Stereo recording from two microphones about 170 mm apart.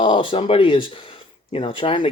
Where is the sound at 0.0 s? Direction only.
30° left (ahead or behind).